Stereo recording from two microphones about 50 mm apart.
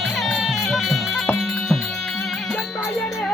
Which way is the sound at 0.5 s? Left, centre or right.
Centre.